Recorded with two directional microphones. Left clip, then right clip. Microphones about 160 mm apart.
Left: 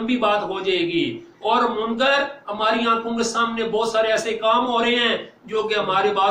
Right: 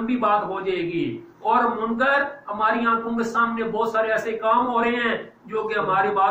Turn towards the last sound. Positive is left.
turn(degrees=20)  # may be behind; listen again after turning